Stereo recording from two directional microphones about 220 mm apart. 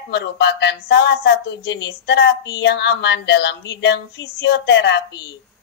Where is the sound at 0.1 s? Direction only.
50° left (ahead or behind).